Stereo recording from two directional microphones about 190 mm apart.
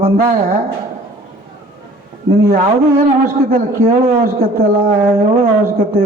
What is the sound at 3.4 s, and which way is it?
Speech, 50° right (ahead or behind).